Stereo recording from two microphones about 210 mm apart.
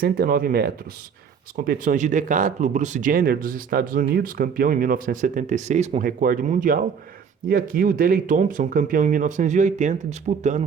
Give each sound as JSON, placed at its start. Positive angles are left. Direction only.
{"t": 0.0, "sound": "speech", "side_deg": -45}